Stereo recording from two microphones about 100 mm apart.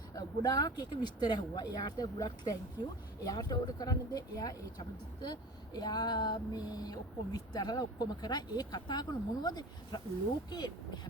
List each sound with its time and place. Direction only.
0.1 s speech: 35° left (ahead or behind)